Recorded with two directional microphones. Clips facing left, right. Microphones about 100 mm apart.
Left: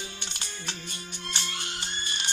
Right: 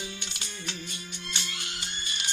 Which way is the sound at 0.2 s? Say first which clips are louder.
Even; 35° left (ahead or behind).